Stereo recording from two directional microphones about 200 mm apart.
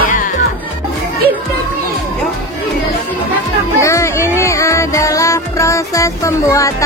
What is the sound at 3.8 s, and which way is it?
Music, 15° left (ahead or behind).